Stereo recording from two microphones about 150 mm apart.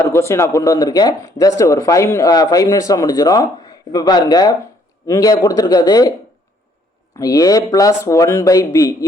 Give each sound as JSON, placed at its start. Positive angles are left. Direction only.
{"t": 0.0, "sound": "a man's voice", "side_deg": 20}
{"t": 7.2, "sound": "a man's voice", "side_deg": 25}